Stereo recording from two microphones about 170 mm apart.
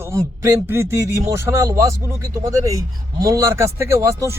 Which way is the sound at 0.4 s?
15° right (ahead or behind).